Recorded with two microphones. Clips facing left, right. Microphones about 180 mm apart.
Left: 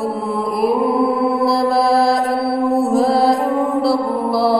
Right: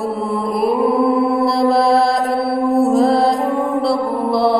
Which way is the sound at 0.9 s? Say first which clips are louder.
Right 1 dB; centre (ahead or behind).